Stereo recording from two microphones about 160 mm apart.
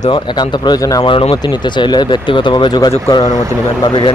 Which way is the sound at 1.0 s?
35° left (ahead or behind).